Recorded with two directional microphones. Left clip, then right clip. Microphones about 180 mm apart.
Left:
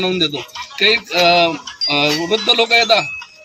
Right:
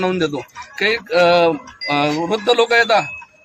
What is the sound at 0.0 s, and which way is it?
A man's voice, 20° right (ahead or behind).